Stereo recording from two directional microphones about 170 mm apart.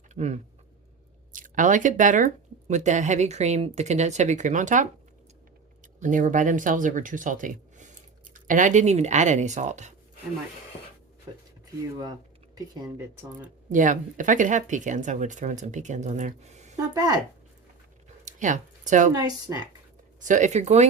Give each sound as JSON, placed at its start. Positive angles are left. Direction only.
{"t": 0.1, "sound": "speech", "side_deg": -40}
{"t": 6.0, "sound": "speech", "side_deg": -50}
{"t": 12.5, "sound": "speech", "side_deg": -20}
{"t": 13.7, "sound": "speech", "side_deg": -50}
{"t": 16.7, "sound": "speech", "side_deg": -20}
{"t": 18.3, "sound": "speech", "side_deg": -50}
{"t": 19.1, "sound": "speech", "side_deg": -20}
{"t": 20.1, "sound": "speech", "side_deg": -50}